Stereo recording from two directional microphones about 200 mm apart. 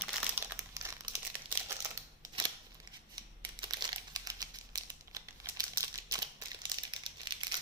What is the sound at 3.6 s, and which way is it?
Crumpling, 20° right (ahead or behind).